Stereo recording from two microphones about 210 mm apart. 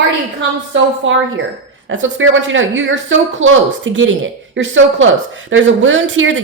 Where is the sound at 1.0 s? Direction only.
65° right (ahead or behind).